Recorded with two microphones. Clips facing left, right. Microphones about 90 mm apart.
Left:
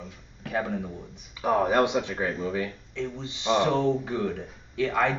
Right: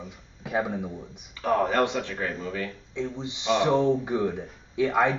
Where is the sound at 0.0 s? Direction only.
15° right (ahead or behind).